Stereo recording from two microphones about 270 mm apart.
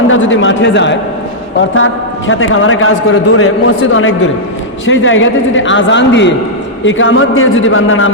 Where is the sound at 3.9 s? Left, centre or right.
Left.